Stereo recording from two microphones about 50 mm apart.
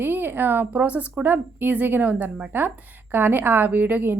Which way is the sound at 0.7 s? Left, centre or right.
Right.